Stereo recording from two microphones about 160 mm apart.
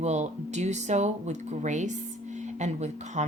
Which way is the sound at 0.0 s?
45° right (ahead or behind).